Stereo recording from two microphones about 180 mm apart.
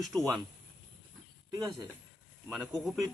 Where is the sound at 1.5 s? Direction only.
20° right (ahead or behind).